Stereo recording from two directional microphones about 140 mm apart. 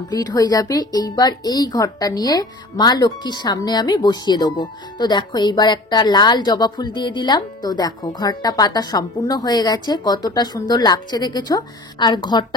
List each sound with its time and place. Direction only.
0.1 s speech: 30° left (ahead or behind)